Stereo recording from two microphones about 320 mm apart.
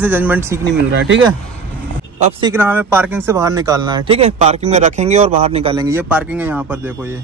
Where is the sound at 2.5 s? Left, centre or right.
Centre.